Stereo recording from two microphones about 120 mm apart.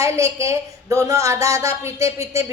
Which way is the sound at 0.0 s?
25° right (ahead or behind).